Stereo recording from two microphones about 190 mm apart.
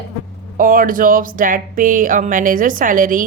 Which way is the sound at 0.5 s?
45° right (ahead or behind).